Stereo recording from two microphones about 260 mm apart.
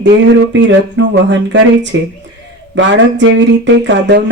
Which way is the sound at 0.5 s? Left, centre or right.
Right.